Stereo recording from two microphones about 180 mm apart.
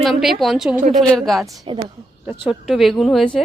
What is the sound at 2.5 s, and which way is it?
Speech, centre (ahead or behind).